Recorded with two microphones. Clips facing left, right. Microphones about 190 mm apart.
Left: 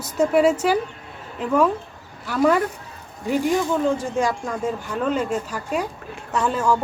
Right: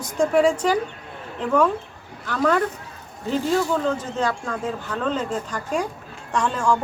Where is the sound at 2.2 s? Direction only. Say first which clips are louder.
Left 2 dB; 10° left (ahead or behind).